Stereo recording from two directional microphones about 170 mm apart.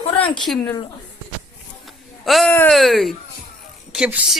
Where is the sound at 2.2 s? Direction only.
Centre (ahead or behind).